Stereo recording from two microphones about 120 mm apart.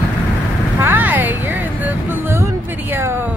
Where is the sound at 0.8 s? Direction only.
15° right (ahead or behind).